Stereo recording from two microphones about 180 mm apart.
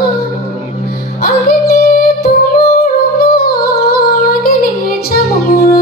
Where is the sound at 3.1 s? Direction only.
55° left (ahead or behind).